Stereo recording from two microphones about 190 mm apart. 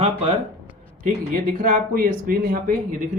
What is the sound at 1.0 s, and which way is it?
Speech, 45° right (ahead or behind).